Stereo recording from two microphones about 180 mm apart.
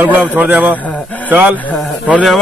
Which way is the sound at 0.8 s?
5° left (ahead or behind).